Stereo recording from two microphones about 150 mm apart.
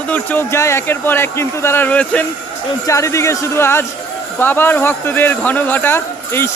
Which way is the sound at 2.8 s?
20° left (ahead or behind).